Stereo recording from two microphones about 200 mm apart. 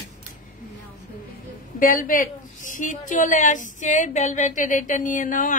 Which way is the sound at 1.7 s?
45° left (ahead or behind).